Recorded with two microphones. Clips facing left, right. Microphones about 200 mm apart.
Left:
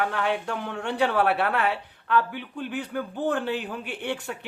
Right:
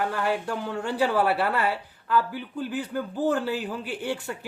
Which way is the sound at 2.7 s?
65° left (ahead or behind).